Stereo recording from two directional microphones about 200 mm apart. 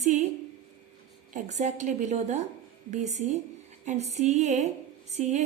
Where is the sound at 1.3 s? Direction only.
35° right (ahead or behind).